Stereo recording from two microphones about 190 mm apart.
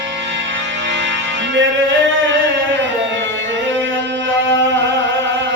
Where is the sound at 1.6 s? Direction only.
75° right (ahead or behind).